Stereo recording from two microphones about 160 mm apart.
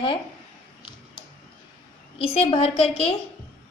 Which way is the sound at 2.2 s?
35° left (ahead or behind).